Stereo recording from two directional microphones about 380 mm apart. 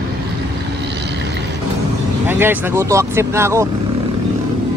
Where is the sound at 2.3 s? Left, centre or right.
Centre.